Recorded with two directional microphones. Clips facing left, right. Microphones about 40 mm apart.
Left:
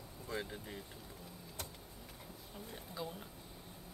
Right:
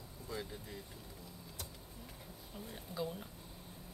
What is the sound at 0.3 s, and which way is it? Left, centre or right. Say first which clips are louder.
Speech: left 2 dB; left.